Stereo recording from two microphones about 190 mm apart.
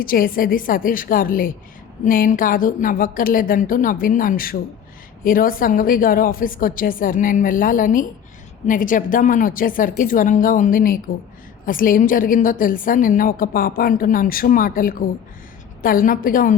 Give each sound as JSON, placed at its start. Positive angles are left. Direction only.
{"t": 0.0, "sound": "a woman's voice", "side_deg": 50}